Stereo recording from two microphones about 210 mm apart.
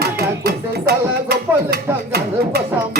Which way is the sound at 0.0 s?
50° right (ahead or behind).